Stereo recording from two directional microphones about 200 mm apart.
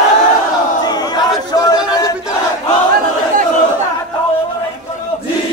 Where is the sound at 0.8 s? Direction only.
20° left (ahead or behind).